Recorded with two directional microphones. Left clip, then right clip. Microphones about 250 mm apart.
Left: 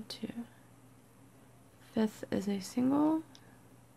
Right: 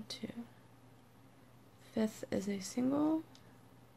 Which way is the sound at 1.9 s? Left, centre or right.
Centre.